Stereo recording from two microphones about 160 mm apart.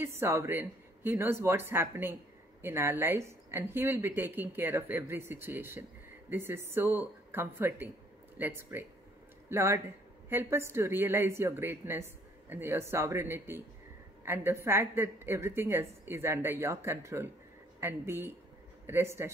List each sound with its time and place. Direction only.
0.0 s a woman's voice: 15° right (ahead or behind)